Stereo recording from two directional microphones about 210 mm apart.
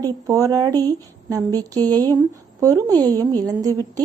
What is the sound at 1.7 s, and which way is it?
Speech, 10° left (ahead or behind).